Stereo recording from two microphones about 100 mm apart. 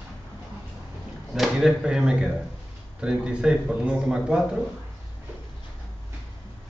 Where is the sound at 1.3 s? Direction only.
5° right (ahead or behind).